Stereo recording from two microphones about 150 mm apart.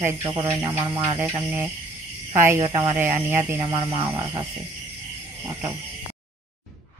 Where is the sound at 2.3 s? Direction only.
15° right (ahead or behind).